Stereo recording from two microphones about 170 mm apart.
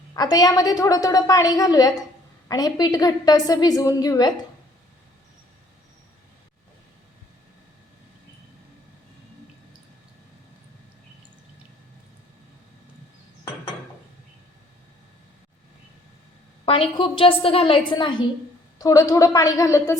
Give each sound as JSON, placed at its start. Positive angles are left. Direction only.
{"t": 0.1, "sound": "a woman's voice", "side_deg": 25}
{"t": 16.6, "sound": "a woman's voice", "side_deg": 30}